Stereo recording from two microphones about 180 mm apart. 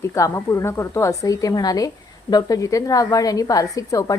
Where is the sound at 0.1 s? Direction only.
15° left (ahead or behind).